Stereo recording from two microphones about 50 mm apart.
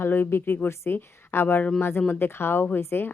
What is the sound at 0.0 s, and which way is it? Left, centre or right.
A woman's voice, left.